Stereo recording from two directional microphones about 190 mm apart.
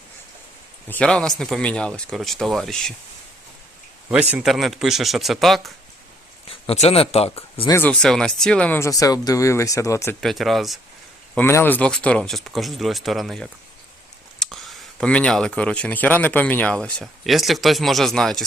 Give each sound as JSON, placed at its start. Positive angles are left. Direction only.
{"t": 0.9, "sound": "speech", "side_deg": 5}
{"t": 4.1, "sound": "speech", "side_deg": -5}
{"t": 6.5, "sound": "speech", "side_deg": 30}
{"t": 7.7, "sound": "speech", "side_deg": 10}
{"t": 10.2, "sound": "speech", "side_deg": 0}
{"t": 11.3, "sound": "speech", "side_deg": 10}